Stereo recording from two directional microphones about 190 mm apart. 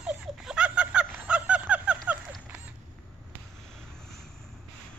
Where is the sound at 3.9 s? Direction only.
5° left (ahead or behind).